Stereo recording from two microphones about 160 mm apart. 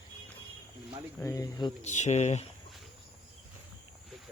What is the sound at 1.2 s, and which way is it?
Speech, 20° left (ahead or behind).